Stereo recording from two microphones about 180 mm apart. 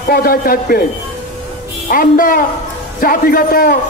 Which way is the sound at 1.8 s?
50° left (ahead or behind).